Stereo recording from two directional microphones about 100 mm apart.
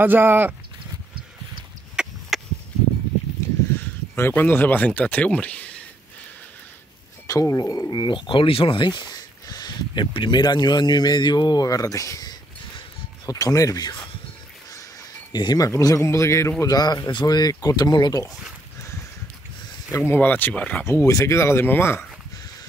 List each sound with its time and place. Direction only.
0.0 s speech: 20° right (ahead or behind)
2.0 s a sound: centre (ahead or behind)
4.1 s speech: 20° left (ahead or behind)
7.2 s speech: 35° left (ahead or behind)
15.3 s speech: 45° left (ahead or behind)
15.7 s speech: 30° left (ahead or behind)
16.6 s speech: 40° left (ahead or behind)
19.9 s speech: 20° left (ahead or behind)
20.8 s speech: 25° left (ahead or behind)